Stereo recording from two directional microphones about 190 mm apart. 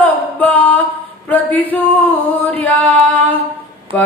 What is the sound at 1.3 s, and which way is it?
Music, 10° left (ahead or behind).